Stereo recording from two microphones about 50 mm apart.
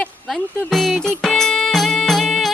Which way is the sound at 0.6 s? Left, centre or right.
Centre.